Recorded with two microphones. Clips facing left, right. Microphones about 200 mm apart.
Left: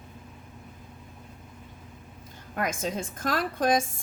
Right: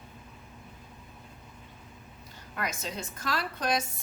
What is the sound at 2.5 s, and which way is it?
A woman's voice, 50° left (ahead or behind).